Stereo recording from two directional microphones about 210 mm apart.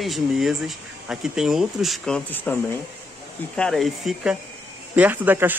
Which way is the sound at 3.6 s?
Centre (ahead or behind).